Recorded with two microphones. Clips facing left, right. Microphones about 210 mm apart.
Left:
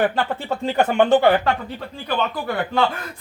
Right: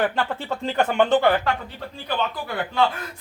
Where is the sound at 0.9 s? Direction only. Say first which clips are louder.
Left 3 dB; 10° left (ahead or behind).